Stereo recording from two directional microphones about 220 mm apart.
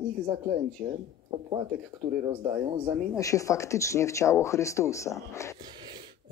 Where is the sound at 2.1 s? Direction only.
10° right (ahead or behind).